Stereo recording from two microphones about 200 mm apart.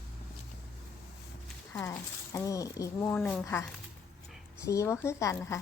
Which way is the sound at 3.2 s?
5° left (ahead or behind).